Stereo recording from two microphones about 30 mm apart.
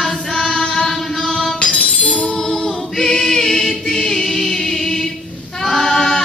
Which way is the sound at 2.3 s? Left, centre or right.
Centre.